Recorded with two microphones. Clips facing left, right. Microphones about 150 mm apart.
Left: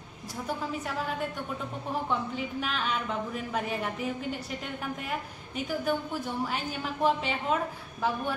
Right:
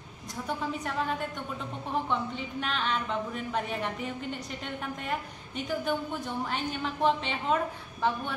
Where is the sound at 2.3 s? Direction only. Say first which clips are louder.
Left 1 dB; 5° left (ahead or behind).